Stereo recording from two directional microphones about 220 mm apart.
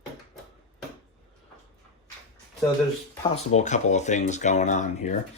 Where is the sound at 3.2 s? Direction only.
30° left (ahead or behind).